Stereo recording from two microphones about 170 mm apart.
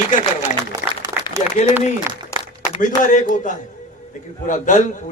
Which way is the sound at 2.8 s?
50° left (ahead or behind).